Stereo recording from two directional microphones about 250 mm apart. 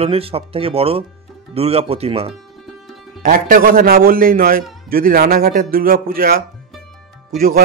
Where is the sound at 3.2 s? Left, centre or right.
Right.